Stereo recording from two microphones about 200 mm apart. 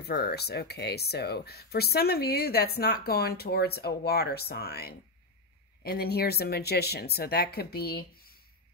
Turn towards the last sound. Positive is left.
turn(degrees=50)  # may be behind; listen again after turning